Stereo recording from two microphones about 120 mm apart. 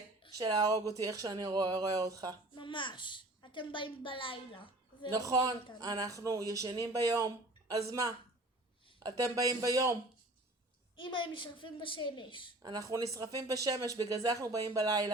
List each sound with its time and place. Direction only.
0.3 s speech: 35° right (ahead or behind)
2.6 s a child's voice: 40° left (ahead or behind)
5.1 s speech: 30° right (ahead or behind)
9.0 s speech: 30° right (ahead or behind)
10.9 s a woman's voice: 45° left (ahead or behind)
12.6 s speech: 30° right (ahead or behind)